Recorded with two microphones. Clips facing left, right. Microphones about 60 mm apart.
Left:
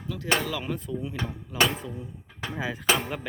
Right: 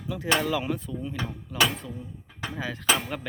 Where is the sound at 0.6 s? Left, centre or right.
Centre.